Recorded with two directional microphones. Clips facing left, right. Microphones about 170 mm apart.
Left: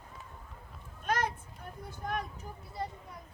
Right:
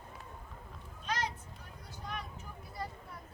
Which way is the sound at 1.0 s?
55° left (ahead or behind).